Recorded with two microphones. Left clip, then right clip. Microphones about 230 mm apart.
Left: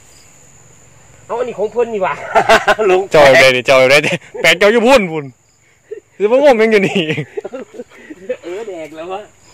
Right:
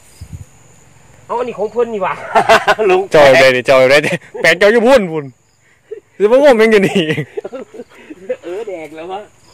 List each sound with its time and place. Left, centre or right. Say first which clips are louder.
1.2 s speech: even; centre
6.1 s speech: right 1 dB; centre